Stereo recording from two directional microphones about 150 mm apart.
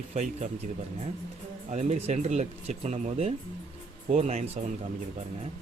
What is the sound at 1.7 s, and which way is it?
Speech, 50° right (ahead or behind).